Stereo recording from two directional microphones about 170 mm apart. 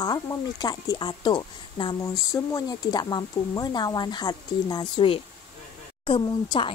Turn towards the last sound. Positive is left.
turn(degrees=30)  # may be behind; listen again after turning